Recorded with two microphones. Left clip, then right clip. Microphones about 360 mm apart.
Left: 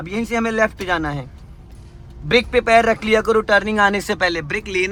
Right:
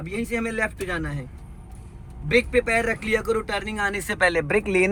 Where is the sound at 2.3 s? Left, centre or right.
Centre.